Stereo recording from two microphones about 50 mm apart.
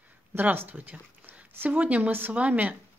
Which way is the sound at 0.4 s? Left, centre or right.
Right.